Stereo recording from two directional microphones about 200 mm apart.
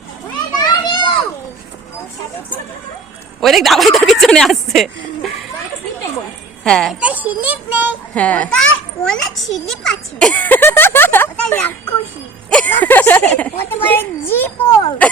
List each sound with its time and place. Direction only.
0.6 s children playing: 20° left (ahead or behind)
3.4 s speech: centre (ahead or behind)
6.7 s speech: 5° left (ahead or behind)
8.1 s a child's voice: 5° left (ahead or behind)